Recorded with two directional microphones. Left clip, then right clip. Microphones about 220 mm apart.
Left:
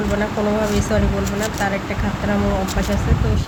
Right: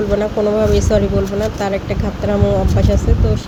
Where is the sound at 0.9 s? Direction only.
20° right (ahead or behind).